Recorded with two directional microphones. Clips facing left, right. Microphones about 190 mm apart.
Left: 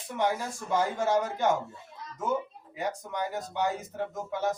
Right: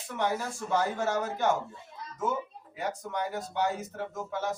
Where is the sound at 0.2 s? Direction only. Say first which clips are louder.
Left 1 dB; 15° left (ahead or behind).